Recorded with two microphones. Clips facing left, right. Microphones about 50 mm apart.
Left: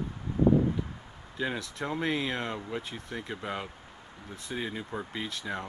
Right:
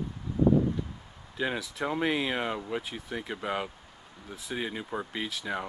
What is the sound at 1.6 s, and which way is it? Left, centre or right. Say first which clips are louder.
Speech: right 3 dB; centre.